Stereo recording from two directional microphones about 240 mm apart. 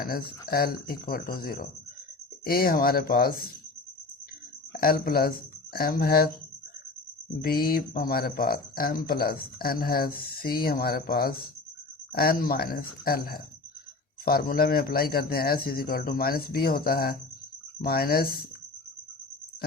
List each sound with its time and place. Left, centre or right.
0.0 s speech: left
4.7 s speech: left
7.4 s speech: left